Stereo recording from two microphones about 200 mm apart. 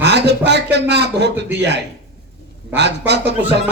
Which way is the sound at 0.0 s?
60° right (ahead or behind).